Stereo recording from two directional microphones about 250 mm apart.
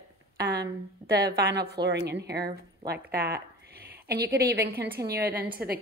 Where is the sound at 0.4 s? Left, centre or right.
Right.